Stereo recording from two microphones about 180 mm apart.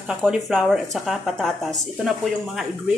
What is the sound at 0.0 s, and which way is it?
A woman's voice, 5° right (ahead or behind).